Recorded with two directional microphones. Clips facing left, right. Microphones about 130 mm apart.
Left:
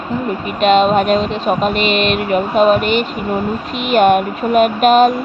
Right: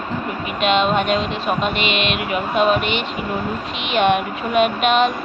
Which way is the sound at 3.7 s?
45° left (ahead or behind).